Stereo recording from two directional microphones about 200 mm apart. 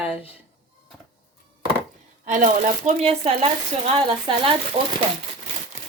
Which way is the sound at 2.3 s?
40° right (ahead or behind).